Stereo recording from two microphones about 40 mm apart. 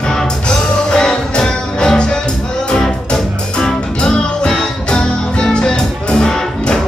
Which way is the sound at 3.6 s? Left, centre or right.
Centre.